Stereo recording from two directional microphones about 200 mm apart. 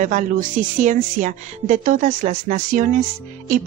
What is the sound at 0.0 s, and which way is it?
Speech, 40° right (ahead or behind).